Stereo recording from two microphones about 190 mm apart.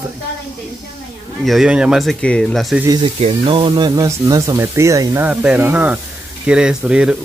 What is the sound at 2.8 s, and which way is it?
Speech, 20° right (ahead or behind).